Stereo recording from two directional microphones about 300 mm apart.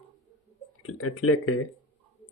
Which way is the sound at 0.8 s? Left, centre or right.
Left.